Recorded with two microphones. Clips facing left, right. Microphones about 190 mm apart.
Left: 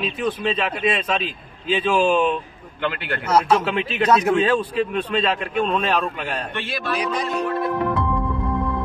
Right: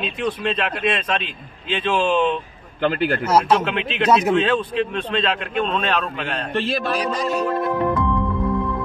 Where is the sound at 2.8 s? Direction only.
35° right (ahead or behind).